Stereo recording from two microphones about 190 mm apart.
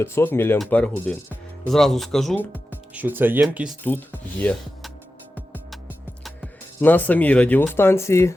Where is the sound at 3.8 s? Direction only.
10° left (ahead or behind).